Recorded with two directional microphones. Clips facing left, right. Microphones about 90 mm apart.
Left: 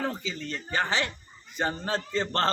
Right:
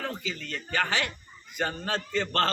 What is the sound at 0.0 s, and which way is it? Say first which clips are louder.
A man's voice: left 3 dB; 30° left (ahead or behind).